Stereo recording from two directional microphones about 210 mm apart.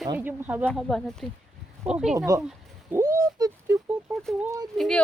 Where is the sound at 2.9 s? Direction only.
15° right (ahead or behind).